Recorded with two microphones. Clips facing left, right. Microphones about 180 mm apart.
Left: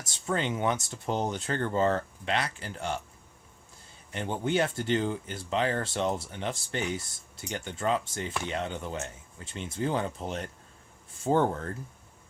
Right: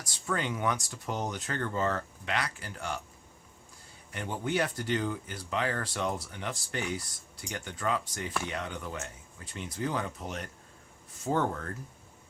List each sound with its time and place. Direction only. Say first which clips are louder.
0.0 s speech: left 3 dB; 25° left (ahead or behind)
4.1 s speech: left 3 dB; 25° left (ahead or behind)